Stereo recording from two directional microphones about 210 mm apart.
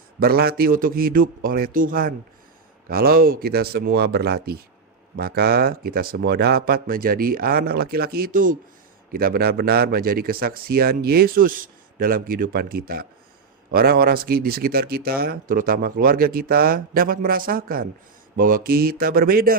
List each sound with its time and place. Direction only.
0.2 s speech: 45° right (ahead or behind)